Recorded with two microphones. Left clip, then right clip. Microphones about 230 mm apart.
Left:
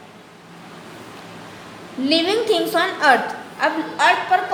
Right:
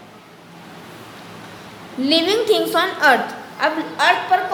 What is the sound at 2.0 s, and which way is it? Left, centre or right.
A woman's voice, centre.